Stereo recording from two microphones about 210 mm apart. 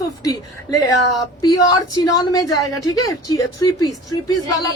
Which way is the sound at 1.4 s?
20° left (ahead or behind).